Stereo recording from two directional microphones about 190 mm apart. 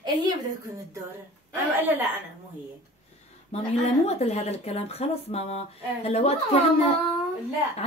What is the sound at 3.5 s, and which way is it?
Speech, 35° left (ahead or behind).